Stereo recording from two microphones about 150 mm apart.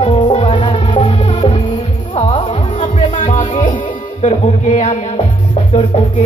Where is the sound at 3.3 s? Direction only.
55° left (ahead or behind).